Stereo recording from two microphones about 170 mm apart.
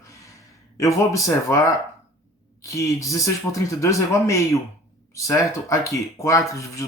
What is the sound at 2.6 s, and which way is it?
Speech, 20° left (ahead or behind).